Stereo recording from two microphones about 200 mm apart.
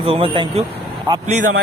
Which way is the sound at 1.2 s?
40° right (ahead or behind).